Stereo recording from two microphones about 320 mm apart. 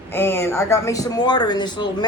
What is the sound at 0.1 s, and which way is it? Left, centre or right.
Speech, centre.